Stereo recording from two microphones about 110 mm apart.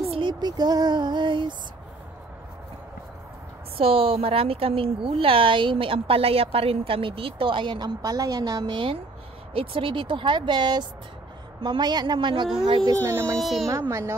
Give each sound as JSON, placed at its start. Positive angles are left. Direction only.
{"t": 0.2, "sound": "speech", "side_deg": -40}
{"t": 3.7, "sound": "a woman's voice", "side_deg": -55}
{"t": 8.0, "sound": "a woman's voice", "side_deg": -35}
{"t": 9.5, "sound": "a woman's voice", "side_deg": -55}
{"t": 13.0, "sound": "speech", "side_deg": -25}
{"t": 13.4, "sound": "a woman's voice", "side_deg": 0}
{"t": 13.7, "sound": "speech", "side_deg": -25}